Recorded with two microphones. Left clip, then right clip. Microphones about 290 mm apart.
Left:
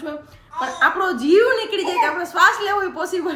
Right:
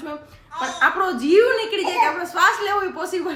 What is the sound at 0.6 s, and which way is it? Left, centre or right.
A woman's voice, centre.